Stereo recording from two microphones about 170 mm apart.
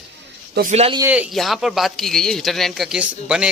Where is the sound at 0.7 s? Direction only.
35° right (ahead or behind).